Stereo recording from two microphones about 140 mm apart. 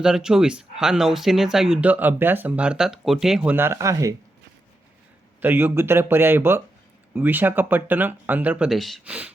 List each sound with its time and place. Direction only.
0.0 s speech: 5° right (ahead or behind)
3.5 s speech: 15° right (ahead or behind)
5.4 s speech: 15° right (ahead or behind)
8.7 s speech: centre (ahead or behind)